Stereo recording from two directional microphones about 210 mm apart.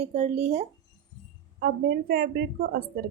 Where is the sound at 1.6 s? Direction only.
45° right (ahead or behind).